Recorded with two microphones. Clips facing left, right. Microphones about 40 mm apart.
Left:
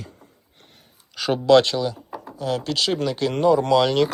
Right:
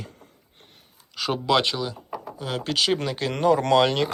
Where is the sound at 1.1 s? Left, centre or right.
Centre.